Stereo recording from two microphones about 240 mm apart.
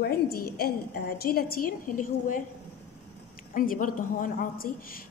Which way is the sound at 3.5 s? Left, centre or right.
Left.